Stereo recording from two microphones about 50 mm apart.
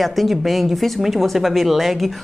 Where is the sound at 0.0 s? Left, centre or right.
Centre.